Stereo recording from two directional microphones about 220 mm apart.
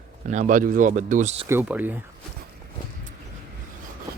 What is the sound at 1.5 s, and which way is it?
Speech, 10° right (ahead or behind).